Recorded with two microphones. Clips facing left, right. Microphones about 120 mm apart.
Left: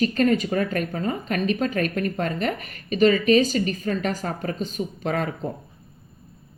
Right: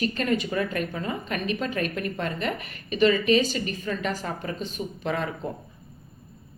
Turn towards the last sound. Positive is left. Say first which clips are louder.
# left 3 dB
turn(degrees=45)  # may be behind; listen again after turning